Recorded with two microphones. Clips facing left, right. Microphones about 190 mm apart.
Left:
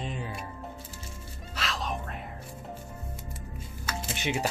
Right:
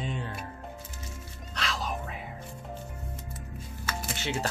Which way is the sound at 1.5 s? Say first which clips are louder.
Even; centre (ahead or behind).